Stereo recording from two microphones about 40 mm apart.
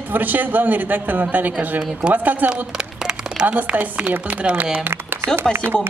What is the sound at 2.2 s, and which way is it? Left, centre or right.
Speech, right.